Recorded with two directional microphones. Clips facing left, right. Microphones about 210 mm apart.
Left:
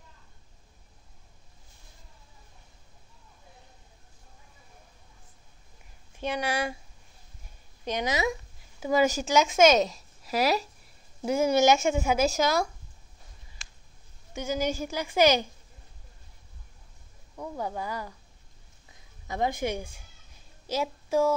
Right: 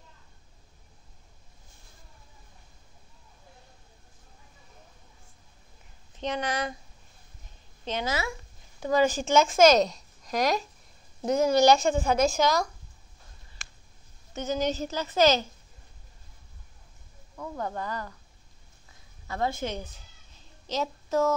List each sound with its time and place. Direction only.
6.1 s speech: 10° left (ahead or behind)
7.8 s speech: 15° left (ahead or behind)
8.7 s a woman's voice: 10° left (ahead or behind)
14.3 s speech: 10° left (ahead or behind)
17.4 s speech: 10° left (ahead or behind)
19.2 s a woman's voice: 15° left (ahead or behind)